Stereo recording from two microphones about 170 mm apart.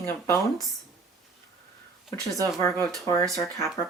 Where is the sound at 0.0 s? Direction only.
15° left (ahead or behind).